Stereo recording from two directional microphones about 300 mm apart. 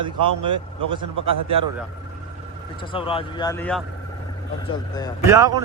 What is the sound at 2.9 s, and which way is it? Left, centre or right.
Speech, centre.